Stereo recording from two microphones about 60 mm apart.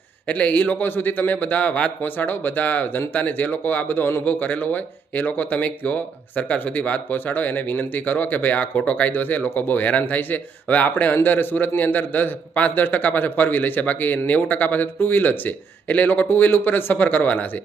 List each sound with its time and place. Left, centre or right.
0.3 s a man's voice: left